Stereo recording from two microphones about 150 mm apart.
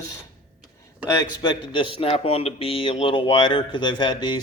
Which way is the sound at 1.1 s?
25° left (ahead or behind).